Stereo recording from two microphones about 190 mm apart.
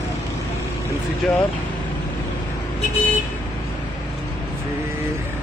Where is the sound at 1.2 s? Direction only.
5° left (ahead or behind).